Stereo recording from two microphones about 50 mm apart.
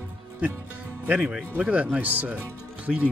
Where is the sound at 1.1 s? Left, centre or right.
Right.